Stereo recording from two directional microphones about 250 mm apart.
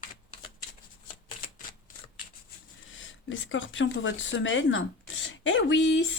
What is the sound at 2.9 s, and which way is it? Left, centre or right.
Speech, left.